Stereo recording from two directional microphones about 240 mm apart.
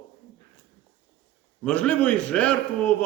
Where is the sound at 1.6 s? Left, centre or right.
Centre.